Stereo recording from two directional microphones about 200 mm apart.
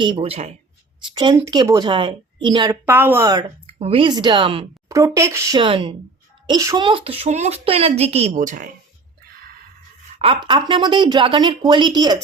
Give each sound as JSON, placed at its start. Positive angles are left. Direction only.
{"t": 0.0, "sound": "speech", "side_deg": -25}
{"t": 1.1, "sound": "speech", "side_deg": -20}
{"t": 3.8, "sound": "speech", "side_deg": -30}
{"t": 10.2, "sound": "speech", "side_deg": -25}